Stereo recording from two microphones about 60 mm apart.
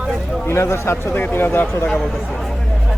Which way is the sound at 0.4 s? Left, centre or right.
Left.